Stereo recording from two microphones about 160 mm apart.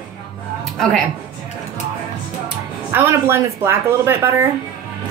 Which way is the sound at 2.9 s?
15° right (ahead or behind).